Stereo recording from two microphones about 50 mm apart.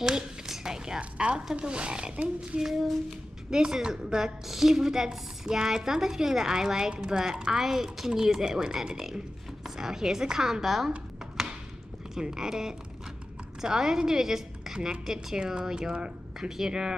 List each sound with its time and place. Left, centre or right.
0.0 s a sound: centre
1.5 s a woman's voice: right
12.1 s a woman's voice: centre